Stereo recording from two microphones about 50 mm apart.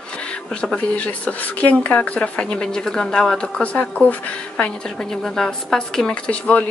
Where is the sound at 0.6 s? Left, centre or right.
Left.